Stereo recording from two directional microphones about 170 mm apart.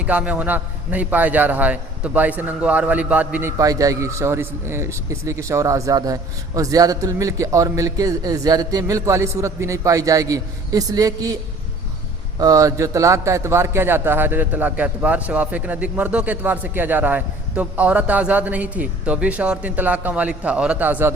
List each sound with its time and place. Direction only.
0.0 s a man's voice: 10° right (ahead or behind)
3.6 s a man's voice: 20° right (ahead or behind)
12.4 s a man's voice: 20° right (ahead or behind)